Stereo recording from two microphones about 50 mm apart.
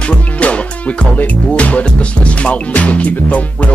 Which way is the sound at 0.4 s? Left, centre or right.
Left.